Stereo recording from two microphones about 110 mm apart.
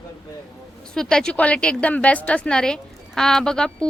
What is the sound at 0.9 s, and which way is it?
A woman's voice, 5° left (ahead or behind).